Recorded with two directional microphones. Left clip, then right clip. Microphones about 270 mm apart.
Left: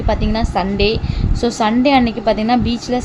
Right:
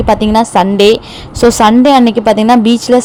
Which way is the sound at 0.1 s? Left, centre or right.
Right.